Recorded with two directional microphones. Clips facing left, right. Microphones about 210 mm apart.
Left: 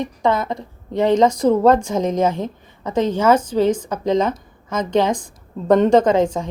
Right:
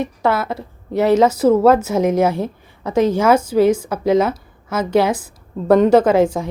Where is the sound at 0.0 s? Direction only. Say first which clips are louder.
Right 1 dB; 5° right (ahead or behind).